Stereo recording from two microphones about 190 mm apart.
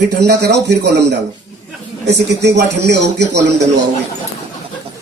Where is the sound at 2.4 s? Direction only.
65° right (ahead or behind).